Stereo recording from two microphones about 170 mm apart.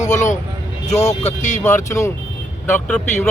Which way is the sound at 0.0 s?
45° left (ahead or behind).